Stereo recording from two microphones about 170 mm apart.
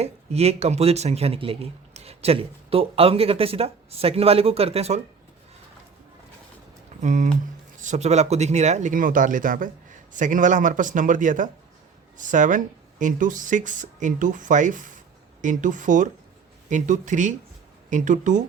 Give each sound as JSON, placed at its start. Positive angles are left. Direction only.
{"t": 0.0, "sound": "speech", "side_deg": -40}
{"t": 7.0, "sound": "speech", "side_deg": -45}